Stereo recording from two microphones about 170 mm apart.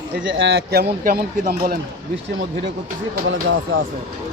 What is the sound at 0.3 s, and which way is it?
Speech, 85° right.